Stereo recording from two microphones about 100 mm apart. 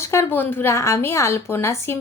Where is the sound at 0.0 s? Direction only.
30° left (ahead or behind).